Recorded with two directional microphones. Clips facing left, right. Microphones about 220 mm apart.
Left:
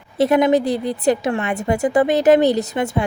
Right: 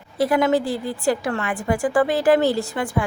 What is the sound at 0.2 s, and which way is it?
Speech, 20° left (ahead or behind).